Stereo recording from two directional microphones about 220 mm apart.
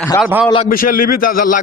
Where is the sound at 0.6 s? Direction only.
40° left (ahead or behind).